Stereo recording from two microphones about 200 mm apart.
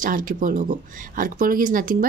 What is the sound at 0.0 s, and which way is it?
Speech, 45° right (ahead or behind).